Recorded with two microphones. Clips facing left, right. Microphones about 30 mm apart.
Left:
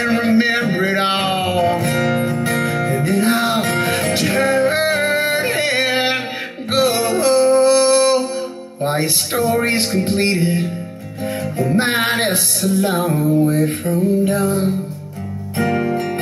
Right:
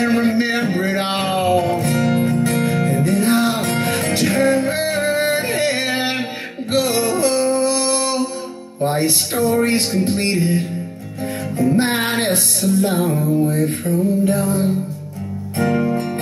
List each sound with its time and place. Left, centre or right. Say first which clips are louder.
0.0 s music: left 1 dB; centre
3.8 s music: left 1 dB; centre